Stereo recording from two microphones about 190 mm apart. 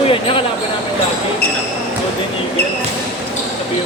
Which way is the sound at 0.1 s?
30° left (ahead or behind).